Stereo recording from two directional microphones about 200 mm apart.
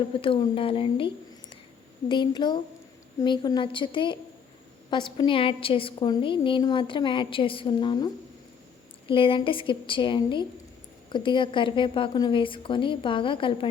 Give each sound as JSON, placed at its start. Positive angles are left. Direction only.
{"t": 0.1, "sound": "a woman's voice", "side_deg": 25}